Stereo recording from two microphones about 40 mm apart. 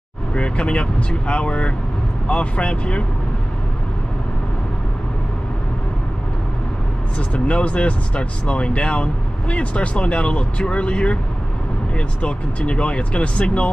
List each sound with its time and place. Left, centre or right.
0.3 s speech: left
7.2 s speech: left
12.2 s speech: left